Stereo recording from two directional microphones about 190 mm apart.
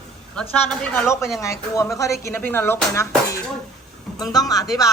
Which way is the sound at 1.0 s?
15° left (ahead or behind).